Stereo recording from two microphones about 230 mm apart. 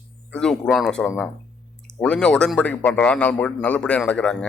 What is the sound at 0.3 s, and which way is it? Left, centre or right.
A man's voice, centre.